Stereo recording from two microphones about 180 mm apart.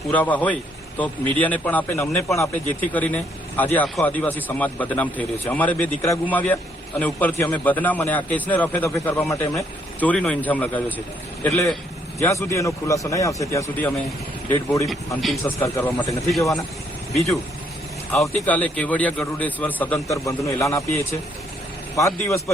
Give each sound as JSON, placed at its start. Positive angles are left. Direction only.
{"t": 0.1, "sound": "a man's voice", "side_deg": 10}
{"t": 14.8, "sound": "a man's voice", "side_deg": 0}
{"t": 18.2, "sound": "a man's voice", "side_deg": 10}